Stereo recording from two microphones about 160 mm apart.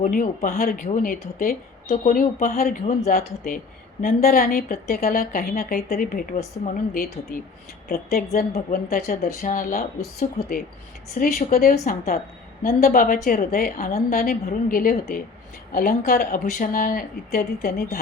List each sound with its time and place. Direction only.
0.0 s a woman's voice: 55° left (ahead or behind)
2.8 s speech: 40° left (ahead or behind)
3.1 s a woman's voice: 60° left (ahead or behind)